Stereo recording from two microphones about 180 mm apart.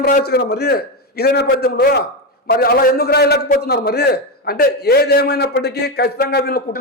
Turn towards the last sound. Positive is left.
turn(degrees=60)  # may be behind; listen again after turning